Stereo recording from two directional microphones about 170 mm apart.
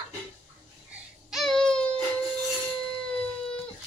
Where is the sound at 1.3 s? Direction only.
Centre (ahead or behind).